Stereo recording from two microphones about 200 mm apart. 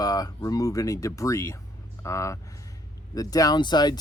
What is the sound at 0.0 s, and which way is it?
Speech, 20° left (ahead or behind).